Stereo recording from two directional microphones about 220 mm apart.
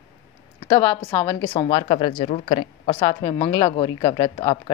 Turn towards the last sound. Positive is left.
turn(degrees=20)  # may be behind; listen again after turning